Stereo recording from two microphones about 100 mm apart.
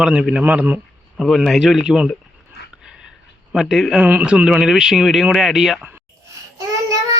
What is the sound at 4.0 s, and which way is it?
Speech, 15° right (ahead or behind).